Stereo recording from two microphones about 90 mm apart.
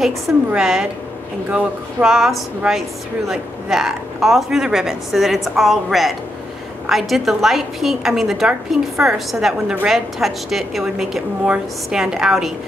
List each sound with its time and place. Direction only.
0.6 s a woman's voice: 5° right (ahead or behind)